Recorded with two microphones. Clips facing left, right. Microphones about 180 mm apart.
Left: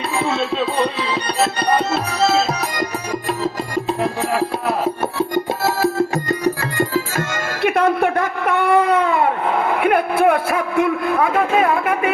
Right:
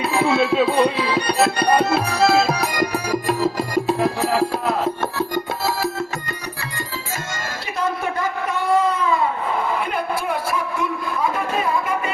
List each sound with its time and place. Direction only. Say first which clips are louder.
0.2 s music: right 3 dB; 5° right (ahead or behind)
7.6 s baby cry: left 9 dB; 60° left (ahead or behind)